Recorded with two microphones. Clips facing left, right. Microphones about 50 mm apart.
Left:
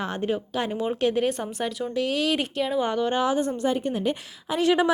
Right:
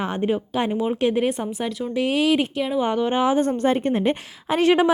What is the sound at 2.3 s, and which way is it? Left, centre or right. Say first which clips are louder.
Speech: right 4 dB; centre.